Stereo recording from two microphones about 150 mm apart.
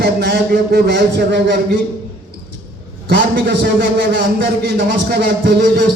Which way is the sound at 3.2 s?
85° right.